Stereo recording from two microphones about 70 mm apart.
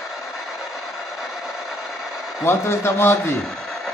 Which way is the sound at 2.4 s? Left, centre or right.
Left.